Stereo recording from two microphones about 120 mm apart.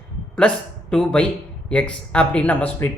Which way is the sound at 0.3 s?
5° left (ahead or behind).